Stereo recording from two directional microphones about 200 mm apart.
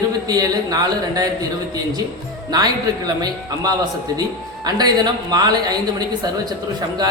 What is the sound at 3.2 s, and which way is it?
A woman's voice, 20° right (ahead or behind).